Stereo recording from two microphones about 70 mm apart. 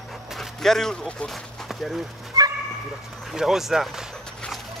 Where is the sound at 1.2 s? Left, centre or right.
Centre.